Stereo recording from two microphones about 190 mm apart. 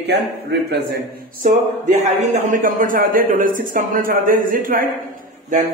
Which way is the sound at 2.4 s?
45° right (ahead or behind).